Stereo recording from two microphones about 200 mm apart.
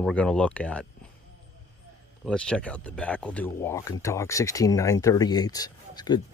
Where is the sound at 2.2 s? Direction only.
5° left (ahead or behind).